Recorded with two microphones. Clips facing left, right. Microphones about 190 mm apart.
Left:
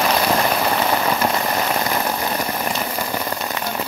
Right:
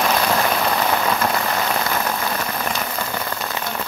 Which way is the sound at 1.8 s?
20° left (ahead or behind).